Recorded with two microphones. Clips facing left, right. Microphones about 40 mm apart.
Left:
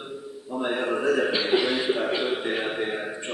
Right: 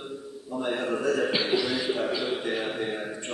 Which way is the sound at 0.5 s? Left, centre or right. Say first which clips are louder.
Left 2 dB; centre.